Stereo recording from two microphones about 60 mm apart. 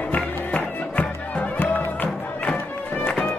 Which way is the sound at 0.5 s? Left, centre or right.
Left.